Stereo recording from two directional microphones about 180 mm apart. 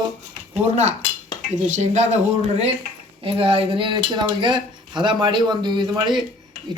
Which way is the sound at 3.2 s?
30° right (ahead or behind).